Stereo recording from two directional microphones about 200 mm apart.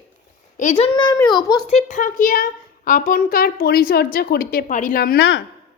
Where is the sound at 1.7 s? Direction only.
40° left (ahead or behind); by 5.4 s 60° left (ahead or behind).